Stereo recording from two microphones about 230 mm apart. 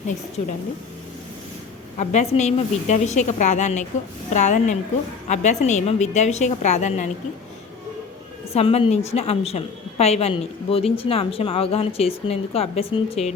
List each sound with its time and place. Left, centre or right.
2.0 s a woman's voice: left
8.5 s a woman's voice: left